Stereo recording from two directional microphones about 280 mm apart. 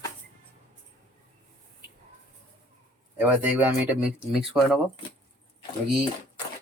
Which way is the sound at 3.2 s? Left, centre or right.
Centre.